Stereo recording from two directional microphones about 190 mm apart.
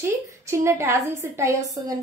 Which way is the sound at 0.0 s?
15° right (ahead or behind).